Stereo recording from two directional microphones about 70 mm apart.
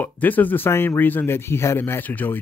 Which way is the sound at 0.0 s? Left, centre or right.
Left.